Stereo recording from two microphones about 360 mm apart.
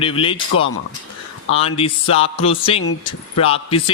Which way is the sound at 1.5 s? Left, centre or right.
Centre.